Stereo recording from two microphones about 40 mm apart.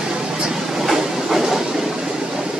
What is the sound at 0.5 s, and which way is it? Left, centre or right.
Train, centre.